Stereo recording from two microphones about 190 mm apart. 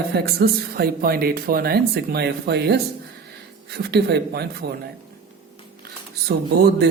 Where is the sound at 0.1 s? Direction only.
55° right (ahead or behind).